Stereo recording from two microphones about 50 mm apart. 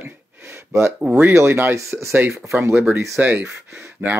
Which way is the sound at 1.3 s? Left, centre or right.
Right.